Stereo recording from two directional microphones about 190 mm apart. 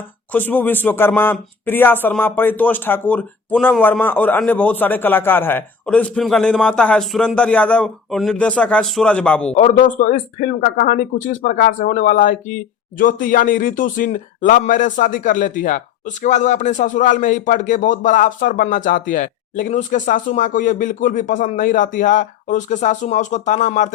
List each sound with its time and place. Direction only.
0.3 s speech: 10° left (ahead or behind)
9.5 s speech: 35° left (ahead or behind)